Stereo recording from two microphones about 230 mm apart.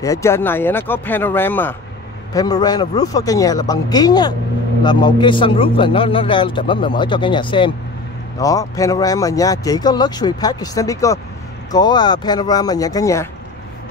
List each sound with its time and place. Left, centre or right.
0.0 s a man's voice: centre